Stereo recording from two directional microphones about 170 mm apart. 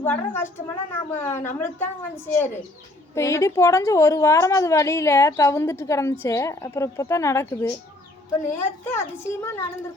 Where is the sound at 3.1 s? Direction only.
15° left (ahead or behind).